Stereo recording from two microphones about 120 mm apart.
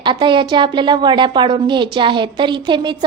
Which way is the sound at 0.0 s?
40° right (ahead or behind).